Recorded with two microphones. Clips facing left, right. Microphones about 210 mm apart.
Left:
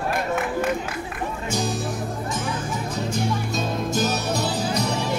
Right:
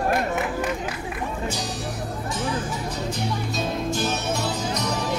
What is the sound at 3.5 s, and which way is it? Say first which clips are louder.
Music: left 1 dB; 40° left (ahead or behind).